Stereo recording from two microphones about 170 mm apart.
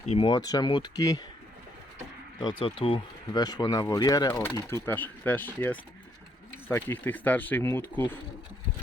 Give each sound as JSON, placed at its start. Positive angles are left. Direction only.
{"t": 0.1, "sound": "speech", "side_deg": 30}
{"t": 2.4, "sound": "speech", "side_deg": 30}